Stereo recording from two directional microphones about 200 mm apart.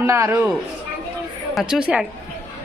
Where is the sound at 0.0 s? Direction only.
15° right (ahead or behind).